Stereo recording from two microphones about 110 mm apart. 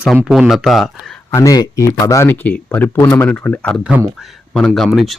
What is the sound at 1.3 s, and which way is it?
Speech, 30° left (ahead or behind).